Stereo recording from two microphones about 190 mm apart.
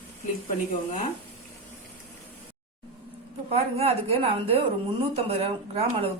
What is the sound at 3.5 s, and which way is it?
A woman's voice, 30° right (ahead or behind).